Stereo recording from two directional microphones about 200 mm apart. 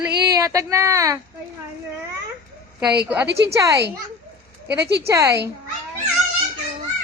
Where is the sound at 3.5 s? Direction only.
15° right (ahead or behind).